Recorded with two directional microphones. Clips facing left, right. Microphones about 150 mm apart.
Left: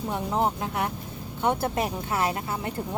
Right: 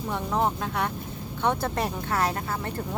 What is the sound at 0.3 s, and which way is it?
Speech, 10° left (ahead or behind).